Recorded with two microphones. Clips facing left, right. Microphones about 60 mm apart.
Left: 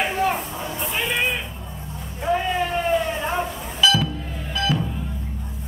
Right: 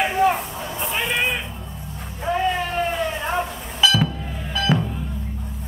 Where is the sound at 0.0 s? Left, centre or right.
Centre.